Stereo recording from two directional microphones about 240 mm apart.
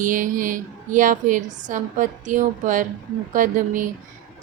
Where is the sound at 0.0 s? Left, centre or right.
Right.